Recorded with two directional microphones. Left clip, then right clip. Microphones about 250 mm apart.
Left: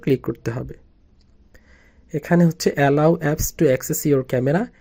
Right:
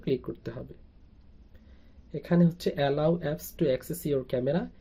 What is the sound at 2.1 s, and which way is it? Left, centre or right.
Speech, left.